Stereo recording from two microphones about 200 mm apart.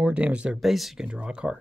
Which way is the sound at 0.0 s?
5° right (ahead or behind).